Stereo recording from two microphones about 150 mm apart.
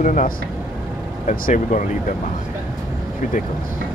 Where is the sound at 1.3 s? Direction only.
60° left (ahead or behind).